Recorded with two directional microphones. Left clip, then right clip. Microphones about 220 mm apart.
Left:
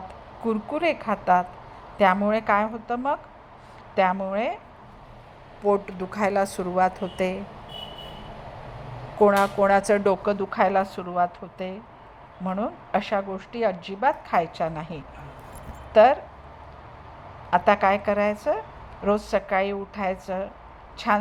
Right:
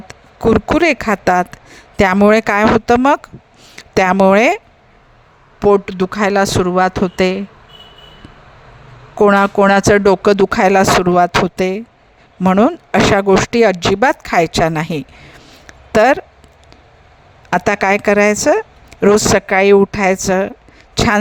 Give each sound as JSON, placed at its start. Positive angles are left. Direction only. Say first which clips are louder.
{"t": 0.4, "sound": "speech", "louder": "right 13 dB", "side_deg": -55}
{"t": 5.5, "sound": "speech", "louder": "right 11 dB", "side_deg": -40}
{"t": 9.1, "sound": "speech", "louder": "right 8 dB", "side_deg": -45}
{"t": 17.5, "sound": "speech", "louder": "right 6 dB", "side_deg": -55}